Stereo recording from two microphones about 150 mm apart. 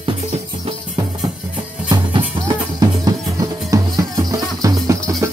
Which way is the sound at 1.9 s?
30° right (ahead or behind).